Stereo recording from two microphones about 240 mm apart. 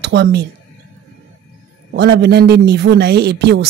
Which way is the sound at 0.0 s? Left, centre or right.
Right.